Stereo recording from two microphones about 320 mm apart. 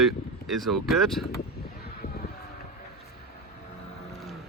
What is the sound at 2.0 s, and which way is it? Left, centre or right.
Vehicle, centre.